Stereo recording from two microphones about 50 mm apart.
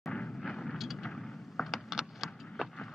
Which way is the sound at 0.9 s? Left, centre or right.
Centre.